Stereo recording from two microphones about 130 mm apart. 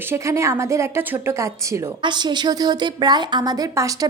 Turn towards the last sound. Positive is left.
turn(degrees=-25)  # may be behind; listen again after turning